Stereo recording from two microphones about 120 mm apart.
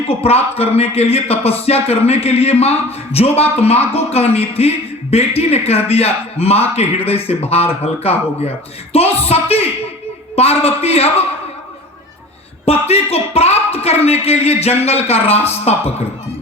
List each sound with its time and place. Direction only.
0.1 s speech: 55° left (ahead or behind)
12.6 s speech: 60° left (ahead or behind)